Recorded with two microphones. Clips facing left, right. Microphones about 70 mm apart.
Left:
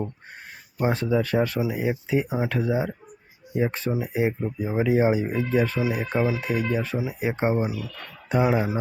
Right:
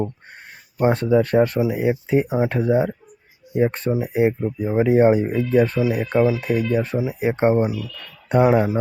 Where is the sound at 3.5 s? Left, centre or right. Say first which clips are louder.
Right 5 dB; right.